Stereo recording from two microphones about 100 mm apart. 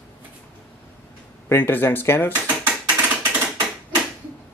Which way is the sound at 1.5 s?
20° left (ahead or behind).